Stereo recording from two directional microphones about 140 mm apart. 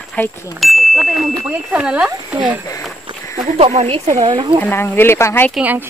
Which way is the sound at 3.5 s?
50° right (ahead or behind).